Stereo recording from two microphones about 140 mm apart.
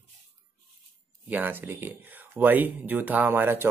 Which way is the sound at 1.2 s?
10° right (ahead or behind).